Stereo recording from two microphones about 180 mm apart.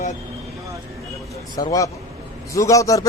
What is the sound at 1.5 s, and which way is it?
A man's voice, 20° left (ahead or behind).